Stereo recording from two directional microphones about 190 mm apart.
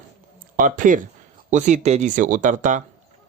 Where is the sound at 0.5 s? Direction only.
45° right (ahead or behind).